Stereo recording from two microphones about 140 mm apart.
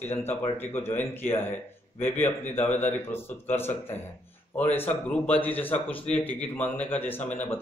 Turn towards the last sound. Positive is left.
turn(degrees=10)  # may be behind; listen again after turning